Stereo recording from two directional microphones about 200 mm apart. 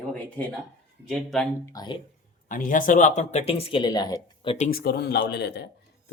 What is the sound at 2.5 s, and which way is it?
Speech, 40° left (ahead or behind).